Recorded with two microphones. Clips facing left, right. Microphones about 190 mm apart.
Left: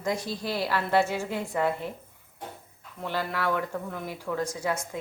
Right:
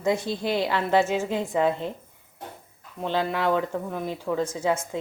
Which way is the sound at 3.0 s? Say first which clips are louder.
Right 5 dB; 20° right (ahead or behind).